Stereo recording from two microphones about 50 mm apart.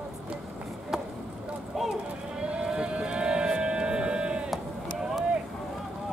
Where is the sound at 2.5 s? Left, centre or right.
Centre.